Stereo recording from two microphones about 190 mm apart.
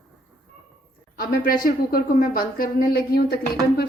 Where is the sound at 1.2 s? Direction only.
50° left (ahead or behind).